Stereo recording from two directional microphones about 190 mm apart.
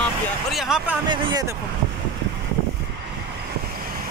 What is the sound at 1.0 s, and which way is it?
Speech, 25° right (ahead or behind).